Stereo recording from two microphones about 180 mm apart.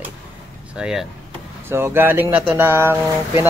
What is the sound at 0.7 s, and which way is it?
Speech, 5° right (ahead or behind).